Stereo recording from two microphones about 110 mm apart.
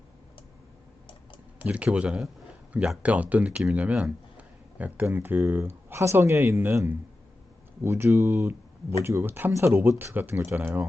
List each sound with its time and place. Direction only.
1.5 s speech: 15° right (ahead or behind)